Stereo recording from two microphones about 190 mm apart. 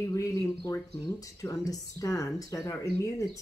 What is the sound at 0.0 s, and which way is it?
Speech, 15° left (ahead or behind).